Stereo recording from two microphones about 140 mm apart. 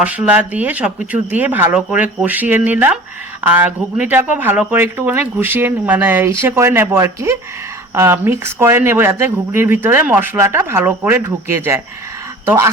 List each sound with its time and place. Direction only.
0.0 s speech: 10° right (ahead or behind)